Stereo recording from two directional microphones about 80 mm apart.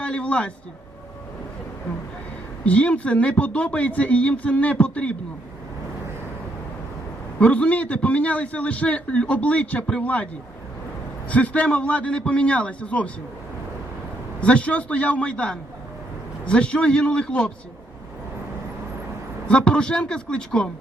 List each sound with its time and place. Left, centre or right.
0.0 s a sound: centre
2.6 s a man's voice: centre
7.3 s a man's voice: centre
11.3 s a man's voice: centre
14.4 s a man's voice: centre
19.5 s a man's voice: centre